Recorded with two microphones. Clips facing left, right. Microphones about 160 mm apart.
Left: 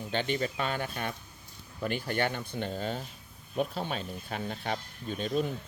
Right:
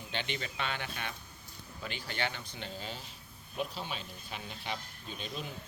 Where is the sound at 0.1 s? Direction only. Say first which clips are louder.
Left 8 dB; 45° left (ahead or behind).